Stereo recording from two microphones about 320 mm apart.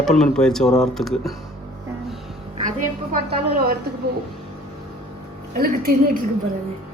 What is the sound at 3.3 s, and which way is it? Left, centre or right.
Speech, right.